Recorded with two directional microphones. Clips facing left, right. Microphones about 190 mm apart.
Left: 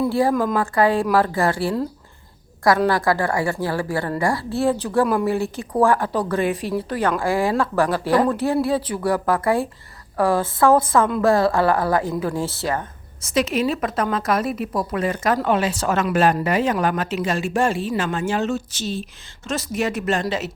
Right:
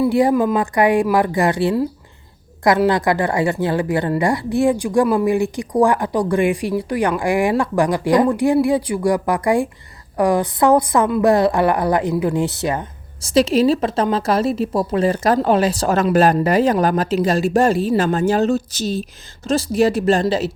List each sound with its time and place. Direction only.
0.1 s a woman's voice: 20° right (ahead or behind)
13.2 s a woman's voice: 35° right (ahead or behind)